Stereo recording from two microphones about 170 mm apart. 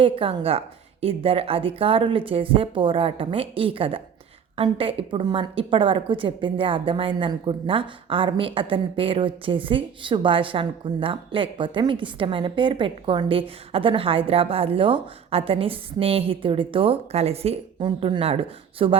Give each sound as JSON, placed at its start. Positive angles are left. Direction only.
{"t": 0.0, "sound": "a woman's voice", "side_deg": -30}